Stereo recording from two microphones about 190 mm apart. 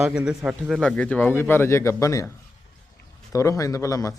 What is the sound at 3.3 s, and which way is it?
Speech, 15° left (ahead or behind).